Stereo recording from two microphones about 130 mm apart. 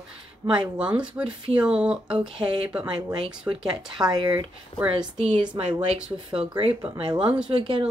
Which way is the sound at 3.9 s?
35° right (ahead or behind).